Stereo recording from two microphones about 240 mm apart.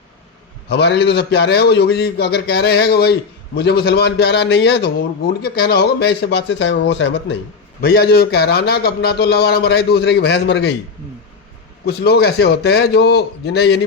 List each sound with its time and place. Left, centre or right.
0.7 s a man's voice: left
11.9 s a man's voice: left